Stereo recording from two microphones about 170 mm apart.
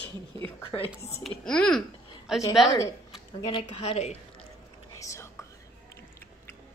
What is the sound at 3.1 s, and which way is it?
Speech, 30° left (ahead or behind).